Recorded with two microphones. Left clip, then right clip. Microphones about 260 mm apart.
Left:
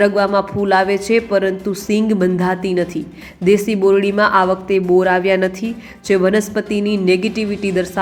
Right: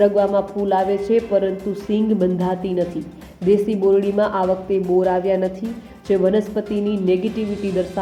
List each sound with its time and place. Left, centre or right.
0.0 s a man's voice: centre